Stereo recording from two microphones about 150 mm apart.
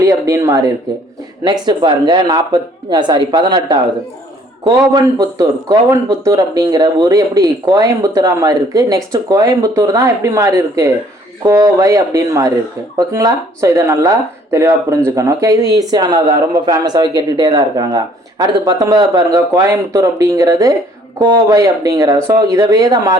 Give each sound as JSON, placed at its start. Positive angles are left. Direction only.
{"t": 0.0, "sound": "a sound", "side_deg": -20}
{"t": 1.5, "sound": "speech", "side_deg": -30}
{"t": 5.1, "sound": "speech", "side_deg": -25}